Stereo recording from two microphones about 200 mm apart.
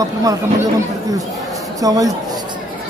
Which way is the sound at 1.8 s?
15° right (ahead or behind).